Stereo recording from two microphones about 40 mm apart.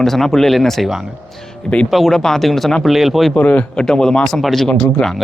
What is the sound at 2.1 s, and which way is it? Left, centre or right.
Speech, centre.